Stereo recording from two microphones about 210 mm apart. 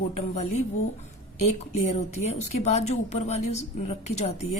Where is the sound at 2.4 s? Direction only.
30° left (ahead or behind).